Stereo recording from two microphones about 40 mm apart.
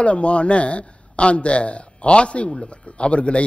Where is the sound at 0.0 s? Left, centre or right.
Left.